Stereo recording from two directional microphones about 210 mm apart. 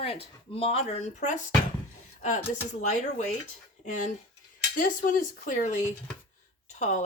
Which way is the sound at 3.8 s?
40° left (ahead or behind).